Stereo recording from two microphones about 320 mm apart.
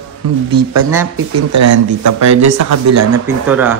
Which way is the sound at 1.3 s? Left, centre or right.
Right.